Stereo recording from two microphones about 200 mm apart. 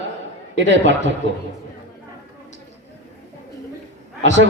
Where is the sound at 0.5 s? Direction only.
65° right (ahead or behind).